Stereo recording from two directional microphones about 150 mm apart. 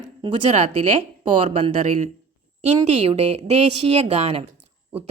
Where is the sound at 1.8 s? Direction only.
55° right (ahead or behind).